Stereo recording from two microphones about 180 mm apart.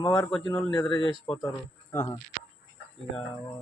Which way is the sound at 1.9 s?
10° left (ahead or behind).